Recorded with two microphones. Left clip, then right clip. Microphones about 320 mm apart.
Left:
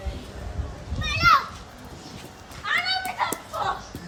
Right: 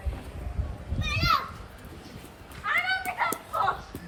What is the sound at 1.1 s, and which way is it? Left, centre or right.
Children playing, centre.